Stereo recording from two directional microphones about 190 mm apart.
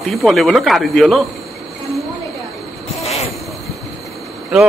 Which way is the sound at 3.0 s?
35° left (ahead or behind).